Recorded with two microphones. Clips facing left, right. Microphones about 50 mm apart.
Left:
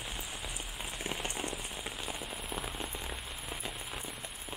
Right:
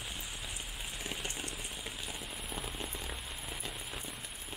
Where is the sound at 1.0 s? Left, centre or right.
Left.